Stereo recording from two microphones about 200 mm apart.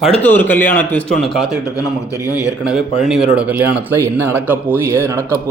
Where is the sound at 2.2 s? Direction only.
15° left (ahead or behind).